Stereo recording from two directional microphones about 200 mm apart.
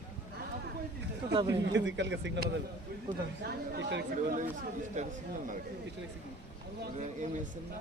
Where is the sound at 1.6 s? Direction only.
65° right (ahead or behind).